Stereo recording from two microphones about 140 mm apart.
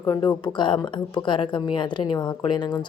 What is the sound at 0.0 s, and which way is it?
A woman's voice, 25° left (ahead or behind).